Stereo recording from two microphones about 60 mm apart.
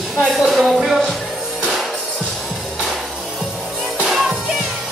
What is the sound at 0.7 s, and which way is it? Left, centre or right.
Music, centre.